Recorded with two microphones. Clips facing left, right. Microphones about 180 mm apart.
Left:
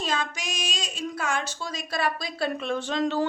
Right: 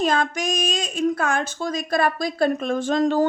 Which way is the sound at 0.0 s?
55° right (ahead or behind).